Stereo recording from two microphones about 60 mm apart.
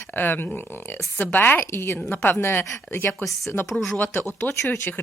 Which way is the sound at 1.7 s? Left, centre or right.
Left.